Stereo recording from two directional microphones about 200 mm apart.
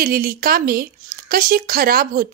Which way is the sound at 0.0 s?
50° right (ahead or behind).